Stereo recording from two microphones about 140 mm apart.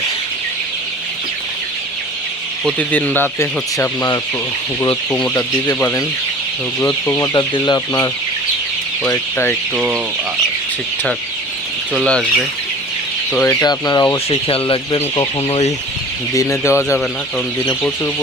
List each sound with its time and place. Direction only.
2.9 s speech: 10° left (ahead or behind)
6.8 s speech: 20° left (ahead or behind)
7.3 s speech: 30° left (ahead or behind)
9.0 s speech: 15° left (ahead or behind)
11.9 s speech: 5° left (ahead or behind)
13.4 s speech: 20° left (ahead or behind)
14.3 s speech: 40° left (ahead or behind)
16.3 s speech: 20° left (ahead or behind)